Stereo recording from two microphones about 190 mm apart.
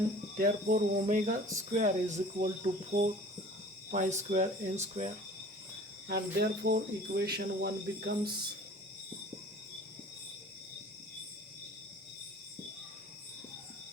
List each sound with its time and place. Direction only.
0.3 s cricket: 50° right (ahead or behind)
1.5 s speech: 40° right (ahead or behind)
2.9 s speech: 55° right (ahead or behind)
3.9 s speech: 40° right (ahead or behind)
6.1 s speech: 55° right (ahead or behind)